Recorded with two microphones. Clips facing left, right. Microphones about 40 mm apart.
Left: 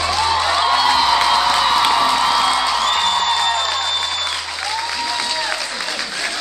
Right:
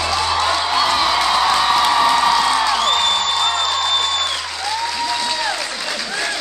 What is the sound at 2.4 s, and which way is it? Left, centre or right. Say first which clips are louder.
Music: even; centre.